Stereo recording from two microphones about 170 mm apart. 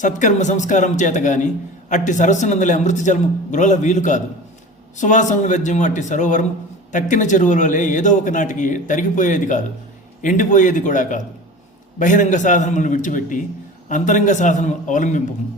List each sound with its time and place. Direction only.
0.0 s a man's voice: 45° left (ahead or behind)